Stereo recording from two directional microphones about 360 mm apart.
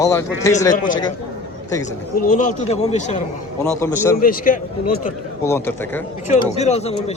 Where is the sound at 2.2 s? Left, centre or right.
Left.